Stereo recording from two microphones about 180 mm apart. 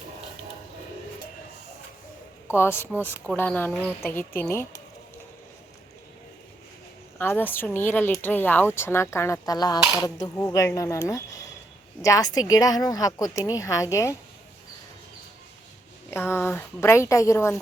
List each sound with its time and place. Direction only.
2.6 s speech: 15° left (ahead or behind)
7.2 s a woman's voice: 10° left (ahead or behind)
16.0 s speech: 10° left (ahead or behind)